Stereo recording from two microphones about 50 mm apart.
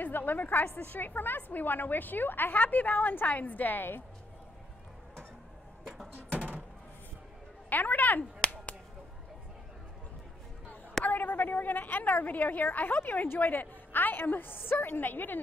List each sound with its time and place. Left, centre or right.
0.0 s a woman's voice: left
7.7 s a woman's voice: left
11.1 s a woman's voice: left